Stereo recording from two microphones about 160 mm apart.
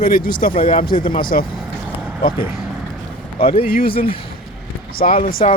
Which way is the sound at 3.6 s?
65° left (ahead or behind).